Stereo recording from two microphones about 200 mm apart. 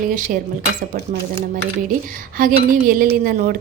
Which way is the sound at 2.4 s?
45° right (ahead or behind).